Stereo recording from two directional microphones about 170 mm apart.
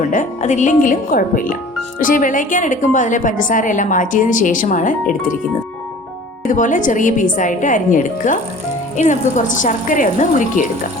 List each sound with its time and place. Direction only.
0.1 s a woman's voice: 45° left (ahead or behind)
6.5 s a woman's voice: 50° left (ahead or behind)